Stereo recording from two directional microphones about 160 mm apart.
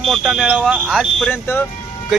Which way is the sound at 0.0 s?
Centre (ahead or behind).